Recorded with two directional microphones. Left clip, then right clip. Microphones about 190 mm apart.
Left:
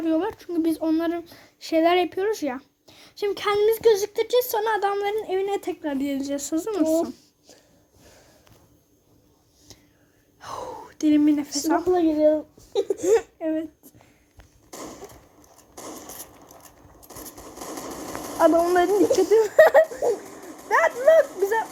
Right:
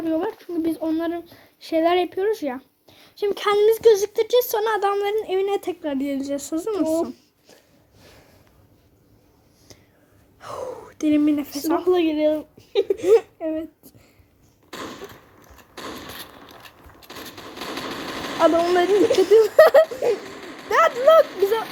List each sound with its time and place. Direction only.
0.0 s speech: 5° left (ahead or behind)
7.0 s a sound: 35° right (ahead or behind)
10.4 s speech: centre (ahead or behind)
11.9 s speech: 40° right (ahead or behind)
13.1 s speech: 5° right (ahead or behind)
14.7 s a sound: 45° right (ahead or behind)
18.3 s speech: 10° right (ahead or behind)
18.9 s speech: 40° right (ahead or behind)
19.3 s speech: centre (ahead or behind)
20.0 s a sound: 40° right (ahead or behind)
20.7 s speech: centre (ahead or behind)
21.2 s speech: 40° right (ahead or behind)